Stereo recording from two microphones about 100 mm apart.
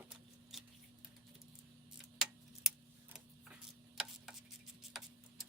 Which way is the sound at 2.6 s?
5° right (ahead or behind).